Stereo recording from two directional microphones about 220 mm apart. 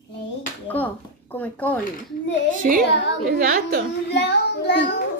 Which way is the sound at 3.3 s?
40° right (ahead or behind).